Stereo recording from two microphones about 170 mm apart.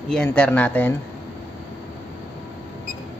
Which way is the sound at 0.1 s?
5° left (ahead or behind).